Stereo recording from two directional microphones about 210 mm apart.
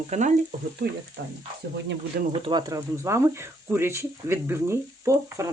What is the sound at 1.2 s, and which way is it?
Speech, 60° right (ahead or behind).